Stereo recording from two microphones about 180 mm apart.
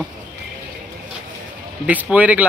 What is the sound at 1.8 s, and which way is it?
Speech, 10° right (ahead or behind).